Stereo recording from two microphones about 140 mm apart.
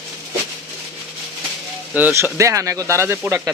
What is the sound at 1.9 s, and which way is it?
Speech, 15° right (ahead or behind).